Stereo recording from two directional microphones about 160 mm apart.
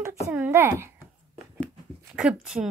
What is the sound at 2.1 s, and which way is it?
Speech, 5° right (ahead or behind).